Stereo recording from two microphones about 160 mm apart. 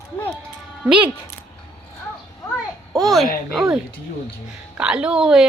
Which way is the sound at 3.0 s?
Centre (ahead or behind).